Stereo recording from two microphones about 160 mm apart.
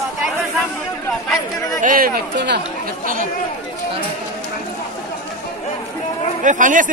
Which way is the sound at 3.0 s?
60° right (ahead or behind).